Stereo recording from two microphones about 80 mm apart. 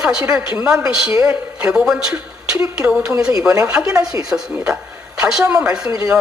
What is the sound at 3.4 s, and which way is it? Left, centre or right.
Speech, right.